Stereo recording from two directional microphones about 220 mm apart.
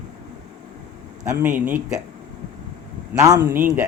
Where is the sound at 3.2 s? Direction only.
15° right (ahead or behind).